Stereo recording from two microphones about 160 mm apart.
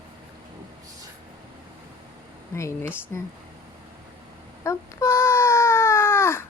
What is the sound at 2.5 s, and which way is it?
Speech, 15° left (ahead or behind).